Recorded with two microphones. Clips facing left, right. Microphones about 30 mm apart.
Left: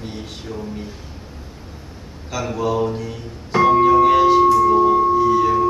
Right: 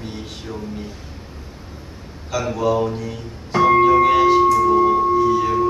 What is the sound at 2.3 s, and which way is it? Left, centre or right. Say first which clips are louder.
Music: right 2 dB; centre.